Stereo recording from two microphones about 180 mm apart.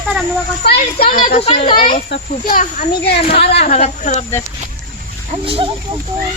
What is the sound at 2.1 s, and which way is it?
Speech, 55° left (ahead or behind).